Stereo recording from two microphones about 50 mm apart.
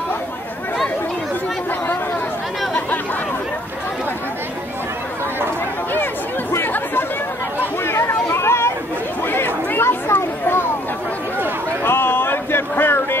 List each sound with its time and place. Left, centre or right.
6.6 s chatter: left
7.8 s chatter: left
9.3 s chatter: left
11.8 s a sound: left